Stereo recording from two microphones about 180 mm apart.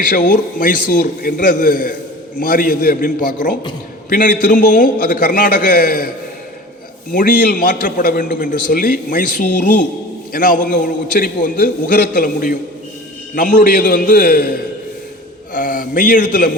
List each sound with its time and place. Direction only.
0.0 s a man's voice: 50° left (ahead or behind)
7.1 s a man's voice: 50° left (ahead or behind)
15.5 s a man's voice: 50° left (ahead or behind)